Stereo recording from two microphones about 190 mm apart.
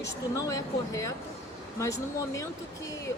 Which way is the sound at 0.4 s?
15° left (ahead or behind).